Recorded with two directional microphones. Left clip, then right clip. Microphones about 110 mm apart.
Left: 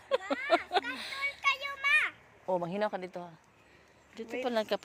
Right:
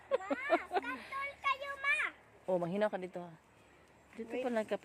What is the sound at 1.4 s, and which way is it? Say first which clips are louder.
Children playing: left 4 dB; 10° right (ahead or behind).